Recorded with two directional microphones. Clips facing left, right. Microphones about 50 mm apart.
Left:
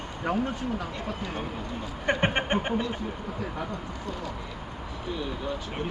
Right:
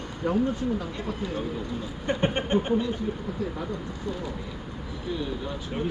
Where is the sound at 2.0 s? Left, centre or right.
Left.